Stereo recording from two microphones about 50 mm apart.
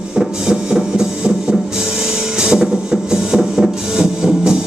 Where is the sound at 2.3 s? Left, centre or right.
Centre.